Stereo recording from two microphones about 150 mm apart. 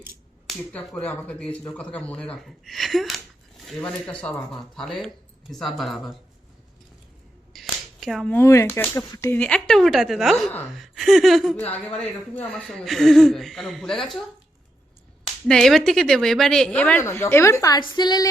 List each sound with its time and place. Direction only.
0.4 s speech: 5° left (ahead or behind)
7.5 s finger snapping: centre (ahead or behind)
8.3 s speech: 15° left (ahead or behind)
9.4 s speech: 5° left (ahead or behind)
15.4 s speech: 5° left (ahead or behind)
17.0 s a woman's voice: 20° left (ahead or behind)